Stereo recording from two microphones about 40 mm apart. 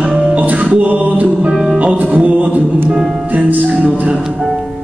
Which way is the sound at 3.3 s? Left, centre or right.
Right.